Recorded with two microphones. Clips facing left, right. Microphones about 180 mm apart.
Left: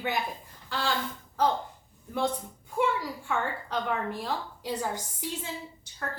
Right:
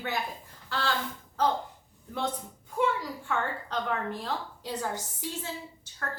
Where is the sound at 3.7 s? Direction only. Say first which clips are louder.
Left 1 dB; 10° left (ahead or behind).